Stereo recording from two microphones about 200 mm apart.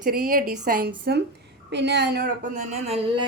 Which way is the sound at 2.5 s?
30° right (ahead or behind).